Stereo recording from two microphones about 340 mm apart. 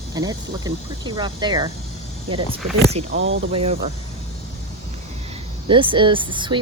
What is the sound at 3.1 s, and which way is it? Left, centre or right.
Speech, right.